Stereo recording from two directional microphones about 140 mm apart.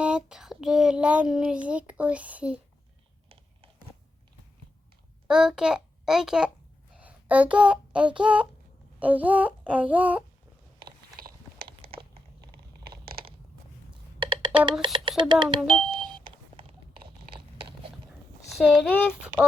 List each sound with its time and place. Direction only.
0.0 s child singing: 5° right (ahead or behind)
5.3 s a child's voice: 5° right (ahead or behind)
6.9 s a sound: 10° right (ahead or behind)
14.3 s computer keyboard: 35° right (ahead or behind)
15.2 s speech: 35° right (ahead or behind)
15.9 s beep: 35° right (ahead or behind)
17.3 s a sound: 40° right (ahead or behind)
18.5 s speech: 10° left (ahead or behind)